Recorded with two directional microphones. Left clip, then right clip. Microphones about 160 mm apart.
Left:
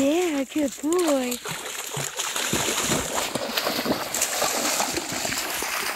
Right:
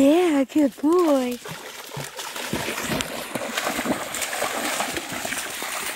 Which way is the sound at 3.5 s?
15° left (ahead or behind).